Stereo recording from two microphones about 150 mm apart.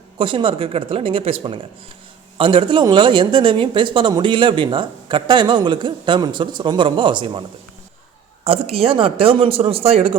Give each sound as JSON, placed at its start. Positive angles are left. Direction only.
{"t": 0.2, "sound": "speech", "side_deg": -35}
{"t": 8.4, "sound": "speech", "side_deg": -40}